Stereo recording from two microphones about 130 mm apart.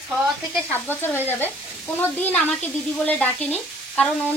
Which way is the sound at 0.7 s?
15° left (ahead or behind).